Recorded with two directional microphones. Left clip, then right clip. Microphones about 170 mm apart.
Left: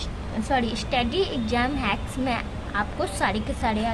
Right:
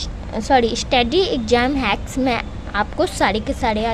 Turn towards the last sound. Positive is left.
turn(degrees=-40)  # may be behind; listen again after turning